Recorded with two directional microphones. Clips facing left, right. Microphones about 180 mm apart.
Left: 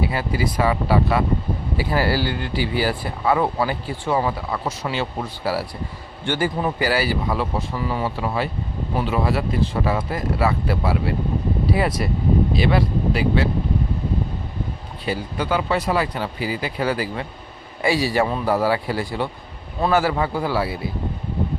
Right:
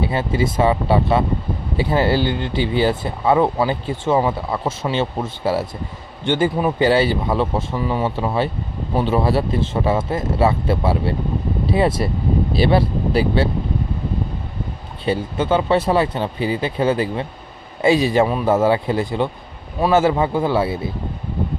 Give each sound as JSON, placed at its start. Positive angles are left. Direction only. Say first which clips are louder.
{"t": 0.0, "sound": "speech", "louder": "right 3 dB", "side_deg": -25}
{"t": 15.0, "sound": "speech", "louder": "right 5 dB", "side_deg": -25}